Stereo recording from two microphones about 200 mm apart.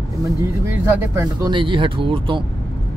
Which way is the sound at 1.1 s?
20° right (ahead or behind).